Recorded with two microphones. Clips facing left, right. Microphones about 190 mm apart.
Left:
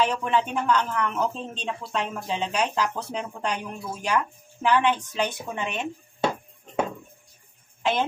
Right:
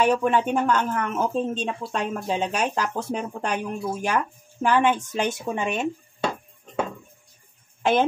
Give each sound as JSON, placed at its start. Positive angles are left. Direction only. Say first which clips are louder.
{"t": 0.0, "sound": "speech", "louder": "right 4 dB", "side_deg": -50}
{"t": 7.8, "sound": "speech", "louder": "right 5 dB", "side_deg": -50}